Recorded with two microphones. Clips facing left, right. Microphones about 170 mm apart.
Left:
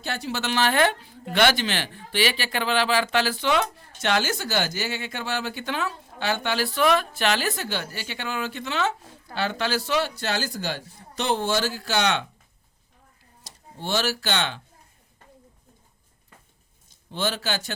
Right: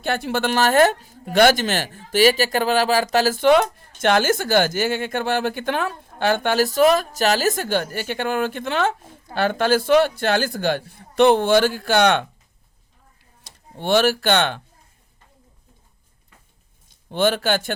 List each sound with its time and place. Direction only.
0.0 s a man's voice: 55° right (ahead or behind)
13.4 s speech: 60° right (ahead or behind)
17.1 s a man's voice: 55° right (ahead or behind)